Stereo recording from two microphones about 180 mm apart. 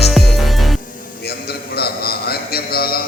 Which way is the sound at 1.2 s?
60° left (ahead or behind).